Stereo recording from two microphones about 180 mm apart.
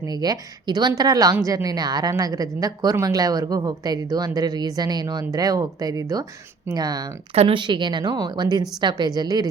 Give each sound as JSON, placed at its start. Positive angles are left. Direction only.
{"t": 0.0, "sound": "speech", "side_deg": -20}